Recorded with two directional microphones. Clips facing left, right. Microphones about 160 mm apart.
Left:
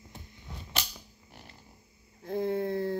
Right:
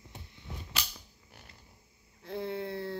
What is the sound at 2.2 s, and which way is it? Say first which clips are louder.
Speech: left 6 dB; 45° left (ahead or behind).